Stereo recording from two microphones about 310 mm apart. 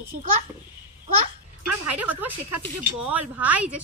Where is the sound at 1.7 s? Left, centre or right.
Right.